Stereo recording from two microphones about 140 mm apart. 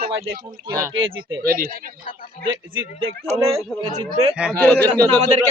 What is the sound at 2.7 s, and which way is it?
Speech, 40° right (ahead or behind).